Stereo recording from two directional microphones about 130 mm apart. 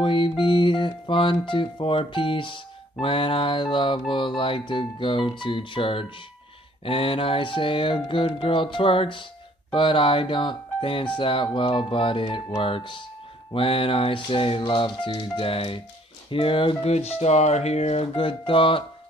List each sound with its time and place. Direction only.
0.0 s music: 40° left (ahead or behind)
6.8 s speech: 45° left (ahead or behind)
11.1 s music: 40° left (ahead or behind)
13.5 s speech: 45° left (ahead or behind)